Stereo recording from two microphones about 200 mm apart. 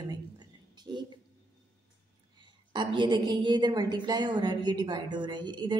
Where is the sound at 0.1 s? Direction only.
20° right (ahead or behind).